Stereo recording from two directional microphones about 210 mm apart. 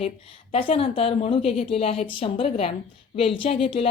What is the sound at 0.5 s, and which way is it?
A woman's voice, 25° left (ahead or behind).